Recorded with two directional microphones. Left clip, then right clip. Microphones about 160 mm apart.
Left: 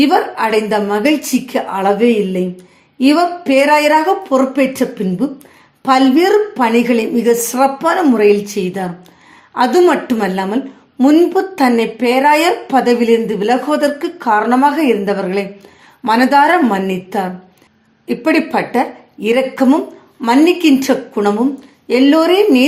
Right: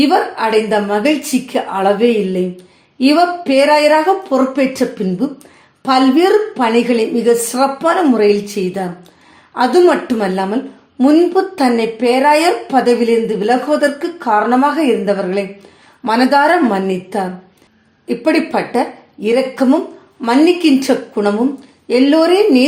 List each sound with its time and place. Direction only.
0.0 s a woman's voice: 30° left (ahead or behind)